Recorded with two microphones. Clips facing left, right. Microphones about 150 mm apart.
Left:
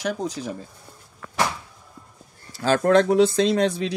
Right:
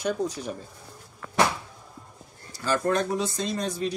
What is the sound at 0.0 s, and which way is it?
Speech, 90° left.